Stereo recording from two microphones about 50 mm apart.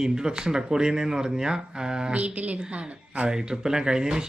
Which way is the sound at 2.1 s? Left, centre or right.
Right.